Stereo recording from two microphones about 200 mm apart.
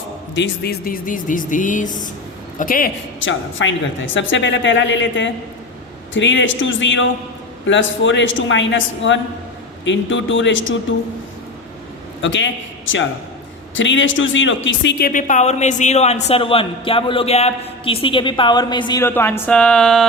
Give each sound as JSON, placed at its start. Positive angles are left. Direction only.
{"t": 0.3, "sound": "a man's voice", "side_deg": 60}
{"t": 3.2, "sound": "speech", "side_deg": 70}
{"t": 12.2, "sound": "a man's voice", "side_deg": 65}